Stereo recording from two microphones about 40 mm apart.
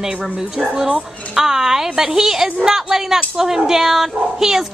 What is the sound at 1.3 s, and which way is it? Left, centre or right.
Speech, centre.